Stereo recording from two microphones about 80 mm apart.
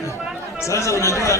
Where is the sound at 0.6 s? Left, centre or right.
Left.